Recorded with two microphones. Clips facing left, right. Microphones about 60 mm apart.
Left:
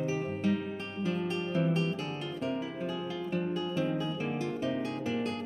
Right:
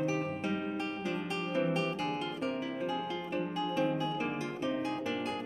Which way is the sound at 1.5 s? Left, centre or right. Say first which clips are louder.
Even; centre.